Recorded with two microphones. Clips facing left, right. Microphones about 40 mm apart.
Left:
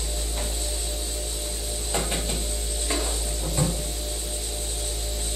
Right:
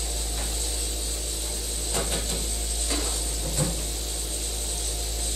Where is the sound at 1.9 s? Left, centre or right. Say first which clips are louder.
Left 2 dB; centre.